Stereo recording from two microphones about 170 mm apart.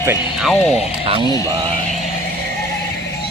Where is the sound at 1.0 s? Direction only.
35° right (ahead or behind).